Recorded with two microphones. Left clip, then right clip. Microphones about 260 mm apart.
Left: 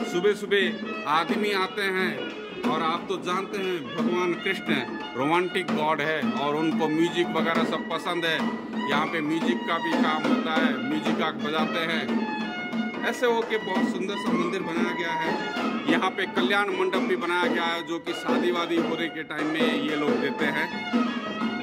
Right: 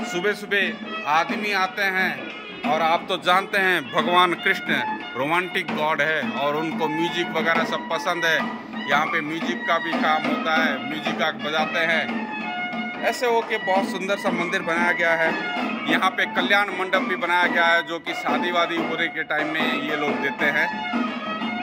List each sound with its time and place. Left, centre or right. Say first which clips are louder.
0.1 s speech: even; centre
13.0 s speech: right 3 dB; centre